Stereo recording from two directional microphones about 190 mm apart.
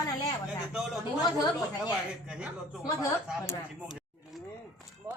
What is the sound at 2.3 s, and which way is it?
Speech, 5° right (ahead or behind).